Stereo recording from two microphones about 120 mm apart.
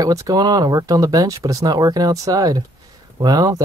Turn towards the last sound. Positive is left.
turn(degrees=-35)  # may be behind; listen again after turning